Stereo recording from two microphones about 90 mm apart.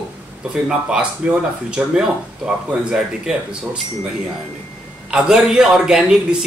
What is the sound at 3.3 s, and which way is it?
Speech, 10° right (ahead or behind).